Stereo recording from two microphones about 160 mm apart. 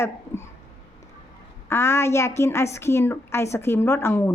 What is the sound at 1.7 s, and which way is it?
A woman's voice, 15° left (ahead or behind).